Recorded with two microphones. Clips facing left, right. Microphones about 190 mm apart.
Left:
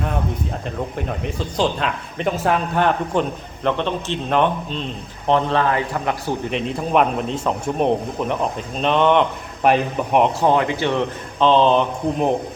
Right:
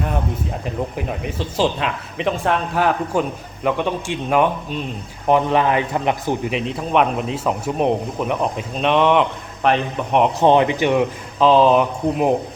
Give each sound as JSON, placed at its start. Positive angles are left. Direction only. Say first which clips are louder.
{"t": 0.9, "sound": "speech", "louder": "even", "side_deg": -5}
{"t": 6.5, "sound": "speech", "louder": "even", "side_deg": 0}
{"t": 10.4, "sound": "speech", "louder": "right 3 dB", "side_deg": -20}
{"t": 11.3, "sound": "speech", "louder": "right 2 dB", "side_deg": -5}